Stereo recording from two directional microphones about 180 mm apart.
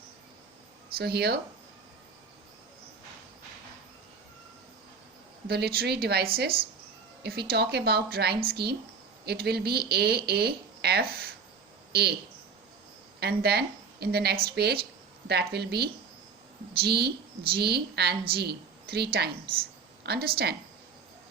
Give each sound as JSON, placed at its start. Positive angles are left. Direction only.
{"t": 0.9, "sound": "speech", "side_deg": -65}
{"t": 5.5, "sound": "speech", "side_deg": -60}
{"t": 13.1, "sound": "a woman's voice", "side_deg": -65}